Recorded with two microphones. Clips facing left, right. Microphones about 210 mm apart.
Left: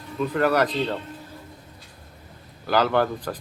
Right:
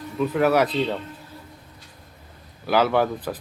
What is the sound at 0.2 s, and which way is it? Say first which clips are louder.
Speech: right 2 dB; 5° right (ahead or behind).